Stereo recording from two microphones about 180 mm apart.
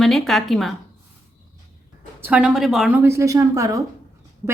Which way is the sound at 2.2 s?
5° right (ahead or behind).